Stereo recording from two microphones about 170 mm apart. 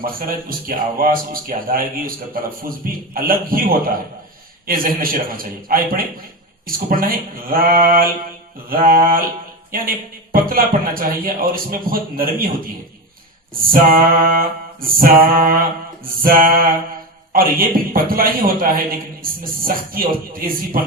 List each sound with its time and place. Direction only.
0.0 s a man's voice: 55° right (ahead or behind)
13.7 s a man's voice: 55° right (ahead or behind)